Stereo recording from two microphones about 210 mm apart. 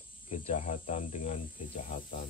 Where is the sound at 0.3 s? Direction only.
35° left (ahead or behind).